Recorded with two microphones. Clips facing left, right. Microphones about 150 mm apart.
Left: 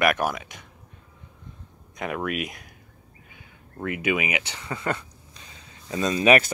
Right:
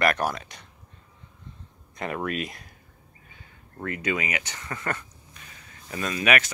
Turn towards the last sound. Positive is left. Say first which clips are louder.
# left 6 dB
turn(degrees=30)  # may be behind; listen again after turning